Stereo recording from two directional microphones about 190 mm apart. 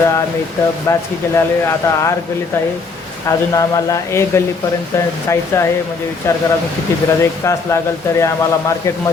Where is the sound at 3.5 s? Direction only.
15° left (ahead or behind).